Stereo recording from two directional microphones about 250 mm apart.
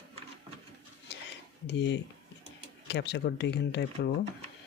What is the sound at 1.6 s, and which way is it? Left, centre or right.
Speech, left.